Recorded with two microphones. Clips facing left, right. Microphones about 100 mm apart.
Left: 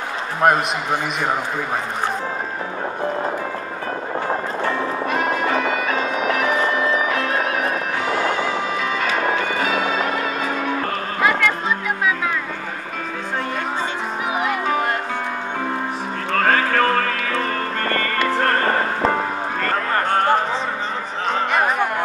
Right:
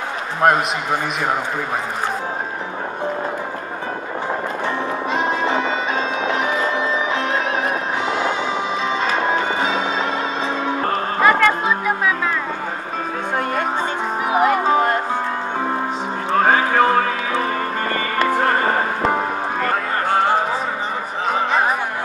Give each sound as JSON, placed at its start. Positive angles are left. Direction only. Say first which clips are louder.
{"t": 4.6, "sound": "music", "louder": "left 1 dB", "side_deg": -20}
{"t": 11.1, "sound": "music", "louder": "right 4 dB", "side_deg": -40}
{"t": 14.2, "sound": "music", "louder": "right 6 dB", "side_deg": -40}
{"t": 16.3, "sound": "music", "louder": "right 2 dB", "side_deg": -15}